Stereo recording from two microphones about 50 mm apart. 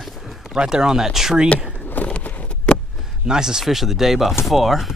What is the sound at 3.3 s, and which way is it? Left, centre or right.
Speech, centre.